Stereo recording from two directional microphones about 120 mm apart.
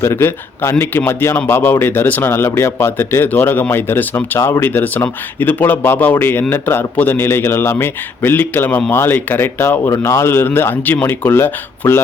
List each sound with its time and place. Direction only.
0.0 s a man's voice: 20° left (ahead or behind)